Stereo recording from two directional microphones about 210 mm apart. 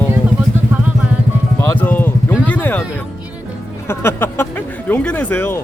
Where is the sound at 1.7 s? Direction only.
10° left (ahead or behind).